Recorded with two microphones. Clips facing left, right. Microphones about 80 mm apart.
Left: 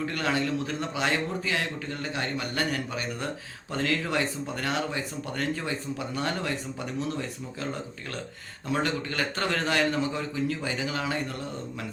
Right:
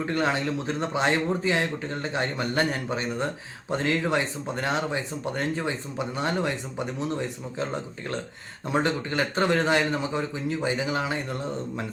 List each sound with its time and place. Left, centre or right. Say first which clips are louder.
0.0 s speech: right 2 dB; right
8.7 s speech: right 3 dB; right